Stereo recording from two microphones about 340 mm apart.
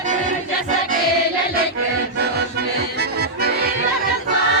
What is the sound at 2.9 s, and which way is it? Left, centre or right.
Accordion, right.